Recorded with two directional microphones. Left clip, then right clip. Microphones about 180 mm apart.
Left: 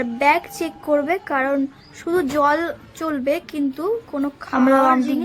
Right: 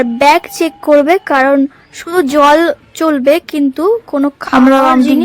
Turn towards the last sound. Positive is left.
turn(degrees=-55)  # may be behind; listen again after turning